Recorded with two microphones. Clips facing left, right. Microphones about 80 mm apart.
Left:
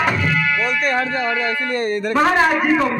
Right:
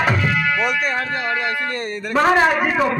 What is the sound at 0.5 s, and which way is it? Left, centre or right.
Music, centre.